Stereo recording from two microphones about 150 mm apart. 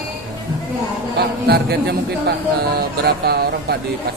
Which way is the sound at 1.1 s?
90° right.